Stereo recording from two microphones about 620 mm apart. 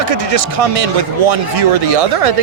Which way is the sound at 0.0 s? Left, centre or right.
Right.